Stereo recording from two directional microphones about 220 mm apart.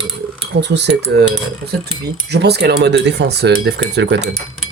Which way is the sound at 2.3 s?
50° right (ahead or behind).